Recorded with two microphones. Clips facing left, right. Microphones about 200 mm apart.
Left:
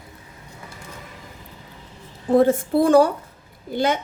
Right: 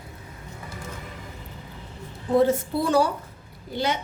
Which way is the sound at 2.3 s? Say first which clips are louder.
Left 4 dB; 50° left (ahead or behind).